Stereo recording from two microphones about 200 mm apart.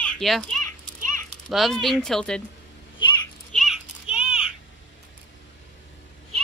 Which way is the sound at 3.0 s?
25° left (ahead or behind).